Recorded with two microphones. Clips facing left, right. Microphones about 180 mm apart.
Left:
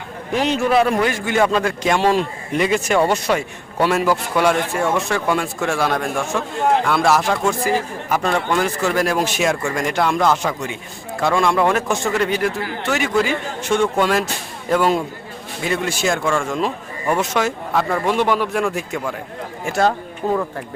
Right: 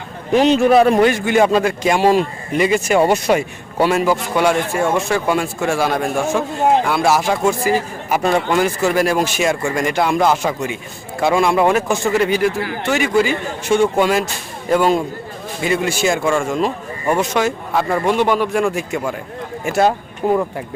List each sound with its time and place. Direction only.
0.3 s a man's voice: 20° right (ahead or behind); by 3.0 s 5° right (ahead or behind)
3.0 s a man's voice: 15° right (ahead or behind)
3.8 s a man's voice: centre (ahead or behind)